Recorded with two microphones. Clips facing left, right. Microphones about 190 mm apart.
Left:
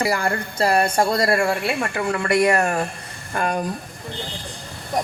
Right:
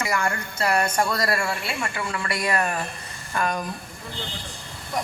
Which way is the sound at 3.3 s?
35° left (ahead or behind).